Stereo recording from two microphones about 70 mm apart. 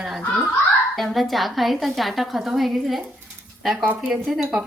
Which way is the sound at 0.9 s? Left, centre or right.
Centre.